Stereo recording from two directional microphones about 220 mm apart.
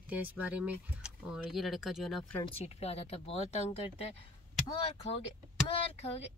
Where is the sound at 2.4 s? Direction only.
30° left (ahead or behind).